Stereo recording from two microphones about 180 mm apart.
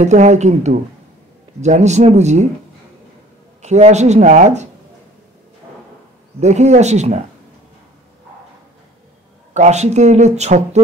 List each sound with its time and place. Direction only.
0.0 s speech: 40° right (ahead or behind)
3.6 s speech: 40° right (ahead or behind)
6.4 s speech: 40° right (ahead or behind)
9.5 s speech: 40° right (ahead or behind)